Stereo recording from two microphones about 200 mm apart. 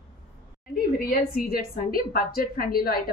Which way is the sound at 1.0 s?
45° left (ahead or behind).